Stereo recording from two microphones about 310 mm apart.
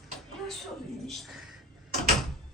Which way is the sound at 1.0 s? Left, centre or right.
Centre.